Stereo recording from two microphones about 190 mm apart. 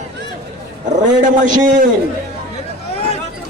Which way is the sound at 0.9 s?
40° right (ahead or behind).